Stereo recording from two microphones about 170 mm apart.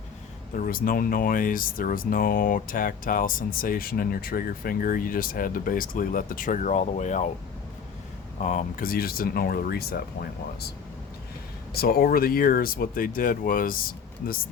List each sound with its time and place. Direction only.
0.5 s speech: 55° left (ahead or behind)
8.4 s speech: 50° left (ahead or behind); by 10.7 s 65° left (ahead or behind)
11.7 s speech: 65° left (ahead or behind)